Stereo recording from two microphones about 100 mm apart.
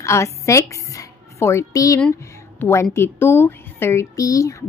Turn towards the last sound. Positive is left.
turn(degrees=35)  # may be behind; listen again after turning